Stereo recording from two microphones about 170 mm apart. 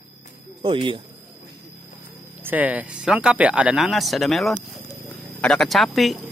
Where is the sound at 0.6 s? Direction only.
30° right (ahead or behind).